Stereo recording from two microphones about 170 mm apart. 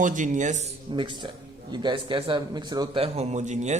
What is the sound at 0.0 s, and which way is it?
Speech, 50° right (ahead or behind).